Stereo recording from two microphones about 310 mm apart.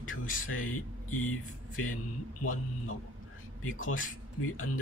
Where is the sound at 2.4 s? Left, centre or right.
Left.